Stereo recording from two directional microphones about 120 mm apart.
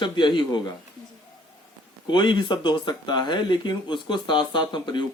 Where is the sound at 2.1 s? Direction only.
40° left (ahead or behind).